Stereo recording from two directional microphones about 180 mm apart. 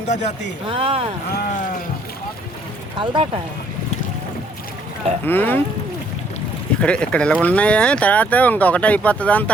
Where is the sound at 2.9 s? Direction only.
30° right (ahead or behind).